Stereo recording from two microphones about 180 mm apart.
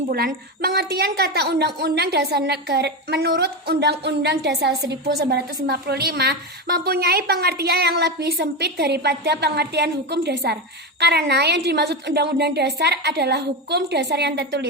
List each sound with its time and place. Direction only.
0.1 s a woman's voice: 55° right (ahead or behind)